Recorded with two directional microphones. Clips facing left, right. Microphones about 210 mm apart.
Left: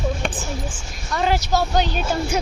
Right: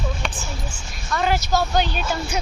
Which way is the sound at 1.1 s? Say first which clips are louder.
Left 1 dB; 30° left (ahead or behind).